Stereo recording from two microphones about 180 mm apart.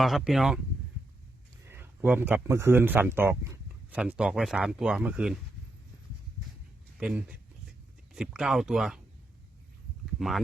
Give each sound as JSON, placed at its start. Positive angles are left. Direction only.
{"t": 0.0, "sound": "speech", "side_deg": 0}
{"t": 1.6, "sound": "speech", "side_deg": -10}
{"t": 7.0, "sound": "speech", "side_deg": -5}
{"t": 10.2, "sound": "speech", "side_deg": 0}